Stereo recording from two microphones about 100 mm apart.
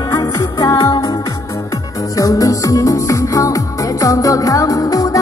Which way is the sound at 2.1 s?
35° left (ahead or behind).